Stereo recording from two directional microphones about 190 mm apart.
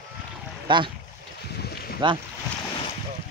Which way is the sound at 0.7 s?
25° right (ahead or behind).